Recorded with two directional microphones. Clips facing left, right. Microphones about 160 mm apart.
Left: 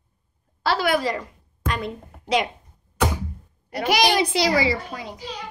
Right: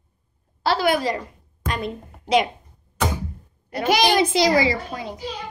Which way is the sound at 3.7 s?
25° right (ahead or behind).